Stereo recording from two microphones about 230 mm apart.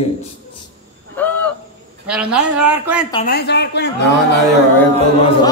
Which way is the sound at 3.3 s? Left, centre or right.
Left.